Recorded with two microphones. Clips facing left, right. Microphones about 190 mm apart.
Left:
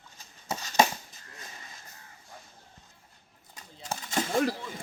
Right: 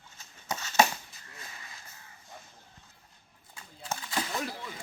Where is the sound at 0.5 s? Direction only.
15° left (ahead or behind).